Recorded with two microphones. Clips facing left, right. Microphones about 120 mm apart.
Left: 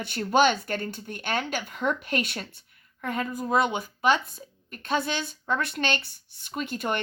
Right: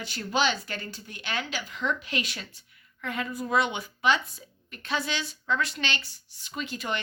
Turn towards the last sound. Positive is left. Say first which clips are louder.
# left 3 dB
turn(degrees=50)  # may be behind; listen again after turning